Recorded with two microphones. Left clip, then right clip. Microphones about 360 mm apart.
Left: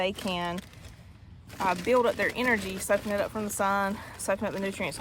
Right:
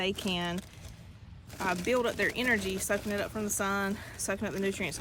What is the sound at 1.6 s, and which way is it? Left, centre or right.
Speech, centre.